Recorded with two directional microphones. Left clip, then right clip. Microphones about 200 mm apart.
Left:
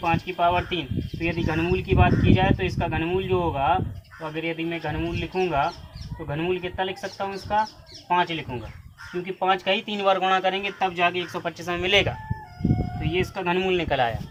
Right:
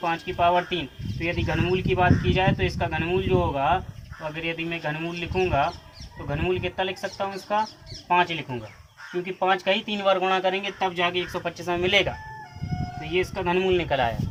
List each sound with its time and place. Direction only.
0.0 s speech: 10° left (ahead or behind)
13.1 s speech: 15° left (ahead or behind)